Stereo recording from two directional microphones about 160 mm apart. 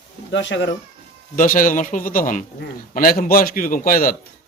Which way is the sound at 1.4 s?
60° left (ahead or behind).